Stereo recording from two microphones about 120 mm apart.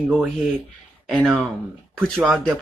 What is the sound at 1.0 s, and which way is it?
Speech, centre (ahead or behind).